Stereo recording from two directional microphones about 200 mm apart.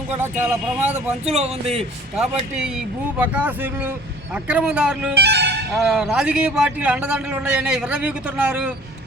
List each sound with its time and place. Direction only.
0.2 s speech: 10° right (ahead or behind)
1.2 s speech: 35° right (ahead or behind)
2.1 s a man's voice: 5° right (ahead or behind)
5.1 s speech: 55° right (ahead or behind)
5.7 s a man's voice: centre (ahead or behind)